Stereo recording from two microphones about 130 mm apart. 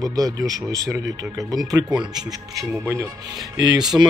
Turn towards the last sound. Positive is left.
turn(degrees=-30)  # may be behind; listen again after turning